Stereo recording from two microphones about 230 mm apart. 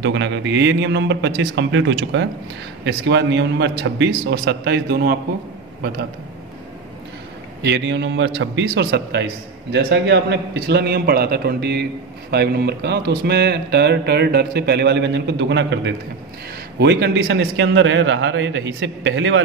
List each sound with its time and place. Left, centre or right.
0.0 s a man's voice: right
7.6 s a man's voice: right